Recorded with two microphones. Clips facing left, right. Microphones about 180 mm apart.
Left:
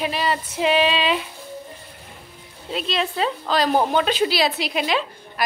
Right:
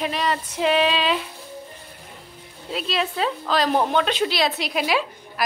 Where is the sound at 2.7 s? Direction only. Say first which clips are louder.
Left 1 dB; 5° right (ahead or behind).